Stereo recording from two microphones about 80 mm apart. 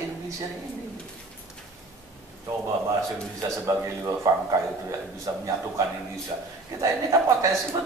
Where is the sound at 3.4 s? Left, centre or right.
Right.